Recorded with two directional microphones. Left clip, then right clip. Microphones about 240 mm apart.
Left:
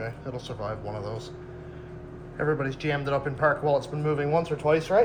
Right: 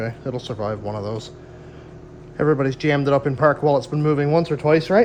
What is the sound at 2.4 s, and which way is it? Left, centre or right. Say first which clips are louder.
Speech: right 8 dB; right.